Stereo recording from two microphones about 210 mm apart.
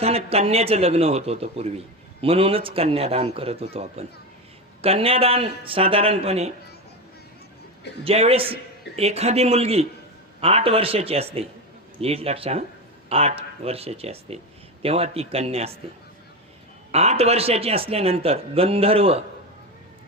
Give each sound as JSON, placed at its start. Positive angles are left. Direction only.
{"t": 0.0, "sound": "a man's voice", "side_deg": -30}
{"t": 8.0, "sound": "a man's voice", "side_deg": -30}
{"t": 16.9, "sound": "a man's voice", "side_deg": -30}